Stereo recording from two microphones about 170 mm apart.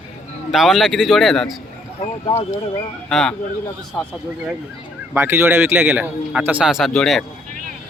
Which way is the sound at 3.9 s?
15° left (ahead or behind).